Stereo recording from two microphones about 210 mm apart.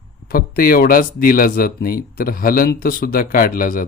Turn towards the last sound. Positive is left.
turn(degrees=40)  # may be behind; listen again after turning